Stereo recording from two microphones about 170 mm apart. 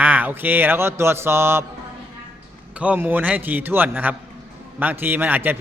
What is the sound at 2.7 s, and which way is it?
A man's voice, 10° right (ahead or behind).